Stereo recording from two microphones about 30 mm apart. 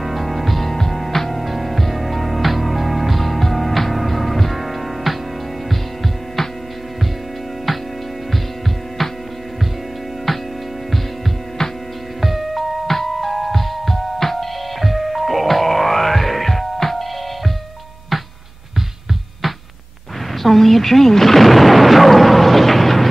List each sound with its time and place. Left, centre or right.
0.0 s music: centre
7.7 s music: centre
10.3 s music: centre
12.2 s music: centre
12.8 s music: centre
18.1 s music: centre
20.4 s a sound: centre